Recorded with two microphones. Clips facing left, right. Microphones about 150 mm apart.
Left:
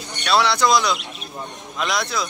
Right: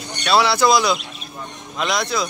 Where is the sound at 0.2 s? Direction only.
5° right (ahead or behind).